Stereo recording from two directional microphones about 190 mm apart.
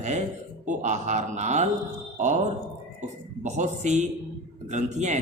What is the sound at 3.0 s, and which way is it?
A man's voice, 40° right (ahead or behind).